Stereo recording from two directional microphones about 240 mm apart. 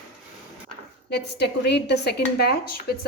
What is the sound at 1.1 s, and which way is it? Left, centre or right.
A woman's voice, left.